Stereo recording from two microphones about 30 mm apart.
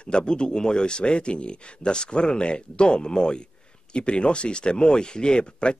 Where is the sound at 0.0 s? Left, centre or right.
Left.